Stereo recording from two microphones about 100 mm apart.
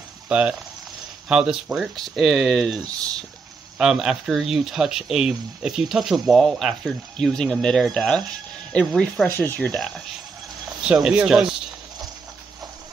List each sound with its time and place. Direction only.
0.3 s speech: 10° right (ahead or behind); by 9.3 s 5° left (ahead or behind)
9.3 s speech: 20° left (ahead or behind)
9.8 s speech: 5° left (ahead or behind)
10.8 s speech: 10° right (ahead or behind)